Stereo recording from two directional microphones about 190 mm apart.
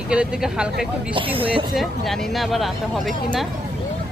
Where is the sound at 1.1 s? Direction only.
30° right (ahead or behind).